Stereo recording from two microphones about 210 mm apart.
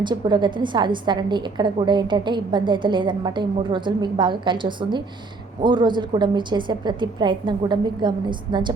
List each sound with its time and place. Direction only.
0.0 s a woman's voice: 20° right (ahead or behind)